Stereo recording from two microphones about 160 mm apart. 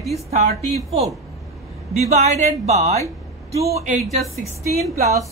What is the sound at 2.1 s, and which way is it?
Speech, 45° right (ahead or behind).